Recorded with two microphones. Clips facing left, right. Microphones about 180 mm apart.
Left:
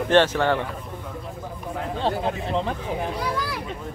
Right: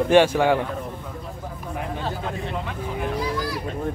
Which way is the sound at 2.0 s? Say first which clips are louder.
Left 4 dB; 30° left (ahead or behind).